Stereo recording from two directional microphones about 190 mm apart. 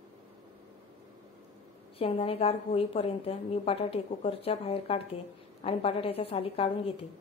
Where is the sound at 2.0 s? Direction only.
30° left (ahead or behind).